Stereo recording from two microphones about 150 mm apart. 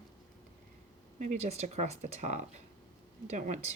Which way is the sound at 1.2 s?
50° right (ahead or behind).